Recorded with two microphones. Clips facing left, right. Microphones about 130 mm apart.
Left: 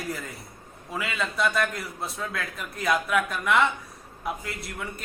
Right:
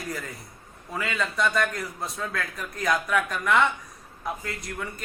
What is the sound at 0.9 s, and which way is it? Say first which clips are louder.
A man's voice: right 1 dB; 5° left (ahead or behind).